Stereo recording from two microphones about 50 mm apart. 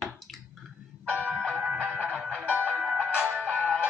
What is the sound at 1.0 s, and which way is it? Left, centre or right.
Music, right.